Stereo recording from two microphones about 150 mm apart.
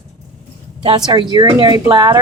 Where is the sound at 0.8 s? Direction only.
30° right (ahead or behind).